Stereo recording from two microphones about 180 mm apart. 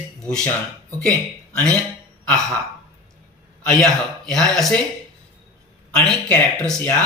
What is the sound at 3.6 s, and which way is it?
Speech, 5° left (ahead or behind).